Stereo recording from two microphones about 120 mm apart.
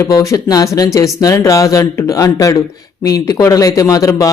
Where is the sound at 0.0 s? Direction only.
25° left (ahead or behind).